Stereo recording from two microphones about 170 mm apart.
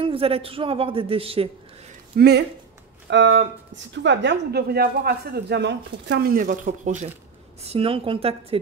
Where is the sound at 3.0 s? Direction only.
90° right; by 7.0 s 50° right (ahead or behind).